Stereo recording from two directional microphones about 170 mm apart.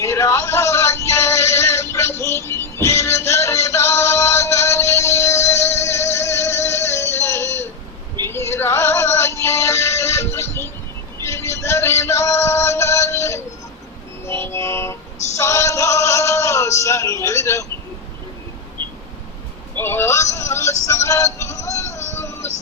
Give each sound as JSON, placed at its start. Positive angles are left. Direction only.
{"t": 0.0, "sound": "synthetic singing", "side_deg": 15}
{"t": 14.3, "sound": "music", "side_deg": 15}
{"t": 15.4, "sound": "male singing", "side_deg": 15}
{"t": 19.8, "sound": "synthetic singing", "side_deg": 15}
{"t": 21.9, "sound": "synthetic singing", "side_deg": 45}